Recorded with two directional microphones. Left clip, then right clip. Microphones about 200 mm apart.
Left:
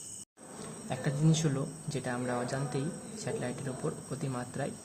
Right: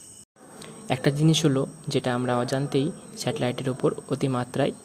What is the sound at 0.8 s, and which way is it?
Speech, 40° right (ahead or behind).